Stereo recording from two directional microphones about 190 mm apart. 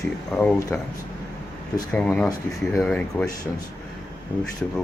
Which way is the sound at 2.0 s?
5° left (ahead or behind).